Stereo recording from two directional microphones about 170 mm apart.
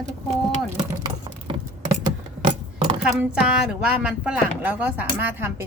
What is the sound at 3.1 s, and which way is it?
A woman's voice, 5° right (ahead or behind).